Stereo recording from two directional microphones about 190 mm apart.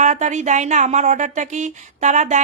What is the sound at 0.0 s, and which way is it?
A woman's voice, 40° right (ahead or behind).